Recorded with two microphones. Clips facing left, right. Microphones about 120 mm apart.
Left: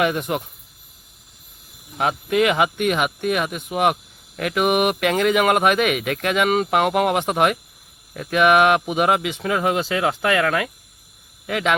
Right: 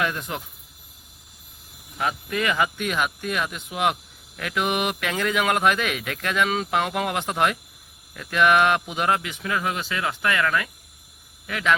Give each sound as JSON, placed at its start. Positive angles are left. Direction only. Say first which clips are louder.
{"t": 0.0, "sound": "speech", "louder": "left 6 dB", "side_deg": 65}
{"t": 2.0, "sound": "speech", "louder": "left 7 dB", "side_deg": 70}
{"t": 10.2, "sound": "cricket", "louder": "left 2 dB", "side_deg": 75}
{"t": 11.4, "sound": "speech", "louder": "left 5 dB", "side_deg": 75}